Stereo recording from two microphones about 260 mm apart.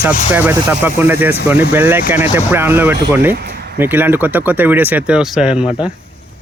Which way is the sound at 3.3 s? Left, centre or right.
Right.